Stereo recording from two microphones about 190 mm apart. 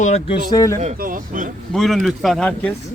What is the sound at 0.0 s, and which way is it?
Speech, 35° left (ahead or behind).